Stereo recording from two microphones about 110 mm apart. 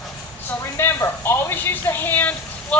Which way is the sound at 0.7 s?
25° left (ahead or behind).